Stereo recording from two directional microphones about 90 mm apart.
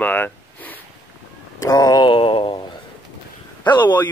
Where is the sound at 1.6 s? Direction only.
45° left (ahead or behind).